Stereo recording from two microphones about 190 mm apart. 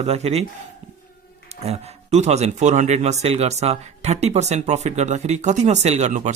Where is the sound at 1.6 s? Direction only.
35° right (ahead or behind).